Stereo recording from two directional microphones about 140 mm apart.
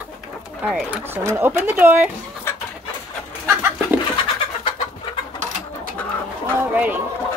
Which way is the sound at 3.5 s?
15° right (ahead or behind).